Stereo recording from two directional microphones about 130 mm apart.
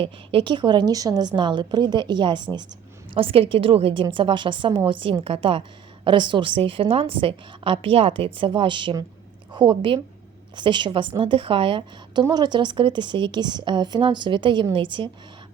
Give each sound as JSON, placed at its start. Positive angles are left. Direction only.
{"t": 0.0, "sound": "a woman's voice", "side_deg": -45}